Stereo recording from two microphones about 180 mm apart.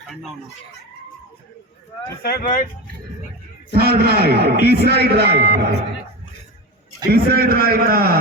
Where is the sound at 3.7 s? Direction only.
60° right (ahead or behind).